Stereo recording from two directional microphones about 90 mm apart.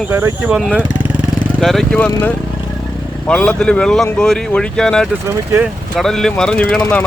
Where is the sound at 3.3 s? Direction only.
10° left (ahead or behind).